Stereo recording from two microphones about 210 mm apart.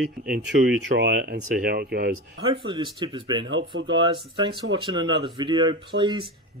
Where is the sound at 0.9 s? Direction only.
50° right (ahead or behind).